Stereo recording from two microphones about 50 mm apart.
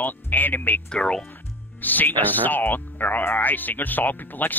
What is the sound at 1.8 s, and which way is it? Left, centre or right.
Speech, left.